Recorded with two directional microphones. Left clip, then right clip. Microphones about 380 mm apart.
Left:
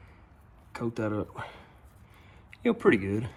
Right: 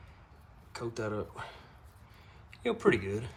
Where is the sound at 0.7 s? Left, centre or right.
Centre.